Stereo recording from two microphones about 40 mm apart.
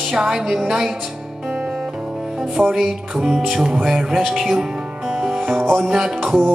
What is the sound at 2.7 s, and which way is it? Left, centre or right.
Speech, centre.